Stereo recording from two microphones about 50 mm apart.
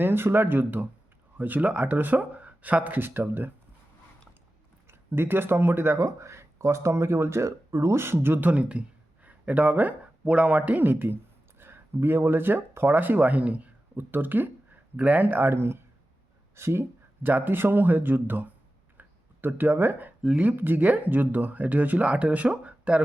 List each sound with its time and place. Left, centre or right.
0.0 s speech: right
4.9 s speech: right
13.9 s speech: right
17.2 s speech: right
18.9 s a sound: right
20.4 s speech: right